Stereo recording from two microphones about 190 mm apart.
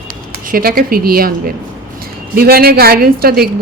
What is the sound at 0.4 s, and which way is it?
Speech, 50° right (ahead or behind).